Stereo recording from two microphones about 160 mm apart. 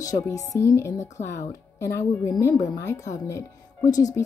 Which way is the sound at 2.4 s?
20° left (ahead or behind).